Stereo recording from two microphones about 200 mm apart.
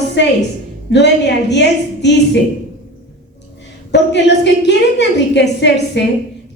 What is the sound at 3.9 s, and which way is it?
A woman's voice, 60° left (ahead or behind).